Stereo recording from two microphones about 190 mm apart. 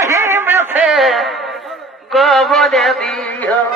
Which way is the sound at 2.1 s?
Centre (ahead or behind).